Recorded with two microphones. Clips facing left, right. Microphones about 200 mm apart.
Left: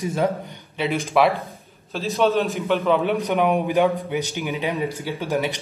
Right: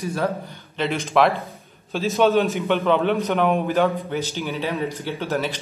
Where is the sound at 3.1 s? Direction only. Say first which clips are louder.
Even; 15° left (ahead or behind).